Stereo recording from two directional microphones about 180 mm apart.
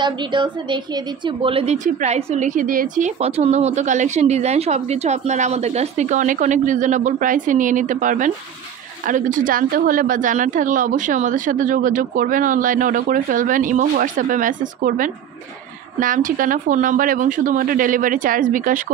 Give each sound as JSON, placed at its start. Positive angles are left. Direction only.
{"t": 0.0, "sound": "a woman's voice", "side_deg": -25}
{"t": 3.2, "sound": "a woman's voice", "side_deg": -35}